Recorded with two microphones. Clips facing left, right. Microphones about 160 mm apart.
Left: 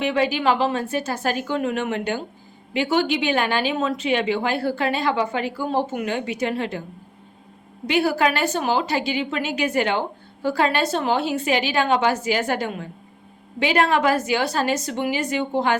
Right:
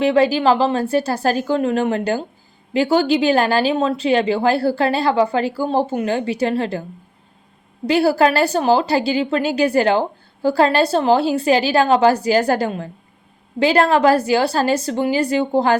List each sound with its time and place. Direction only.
0.0 s a woman's voice: 35° right (ahead or behind)
7.9 s a woman's voice: 35° right (ahead or behind)